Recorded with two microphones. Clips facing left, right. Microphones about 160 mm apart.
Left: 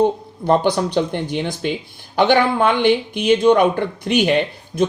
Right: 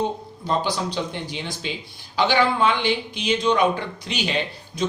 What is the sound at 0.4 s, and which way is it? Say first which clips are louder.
Speech: left 8 dB; 55° left (ahead or behind).